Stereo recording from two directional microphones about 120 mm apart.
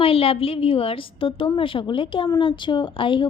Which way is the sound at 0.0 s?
50° left (ahead or behind).